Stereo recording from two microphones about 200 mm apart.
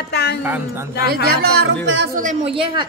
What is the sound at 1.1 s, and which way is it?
Speech, 50° right (ahead or behind).